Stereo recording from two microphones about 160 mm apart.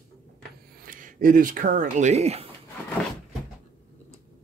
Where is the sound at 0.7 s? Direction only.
55° right (ahead or behind); by 2.5 s 40° right (ahead or behind).